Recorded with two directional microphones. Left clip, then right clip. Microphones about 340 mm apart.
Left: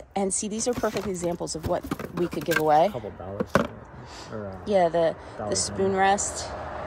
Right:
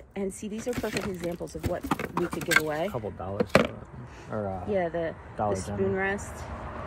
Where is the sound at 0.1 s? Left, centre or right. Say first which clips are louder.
Left 6 dB; centre.